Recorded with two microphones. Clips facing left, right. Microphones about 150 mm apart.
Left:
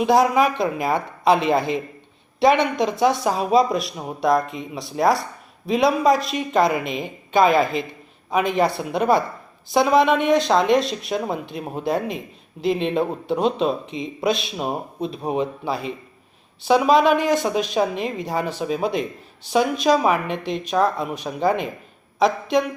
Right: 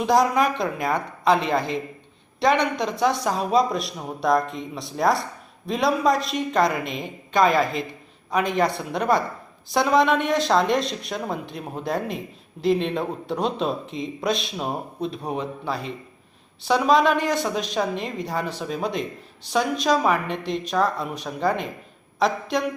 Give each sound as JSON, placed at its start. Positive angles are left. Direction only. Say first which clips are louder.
{"t": 0.0, "sound": "speech", "louder": "left 3 dB", "side_deg": 5}
{"t": 1.2, "sound": "speech", "louder": "left 3 dB", "side_deg": 15}
{"t": 15.2, "sound": "a man's voice", "louder": "left 5 dB", "side_deg": 20}
{"t": 17.2, "sound": "a man's voice", "louder": "left 4 dB", "side_deg": 20}
{"t": 17.5, "sound": "speech", "louder": "left 4 dB", "side_deg": 5}